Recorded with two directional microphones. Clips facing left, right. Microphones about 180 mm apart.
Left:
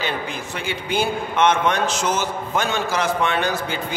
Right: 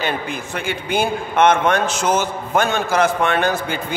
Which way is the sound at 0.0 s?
55° right (ahead or behind).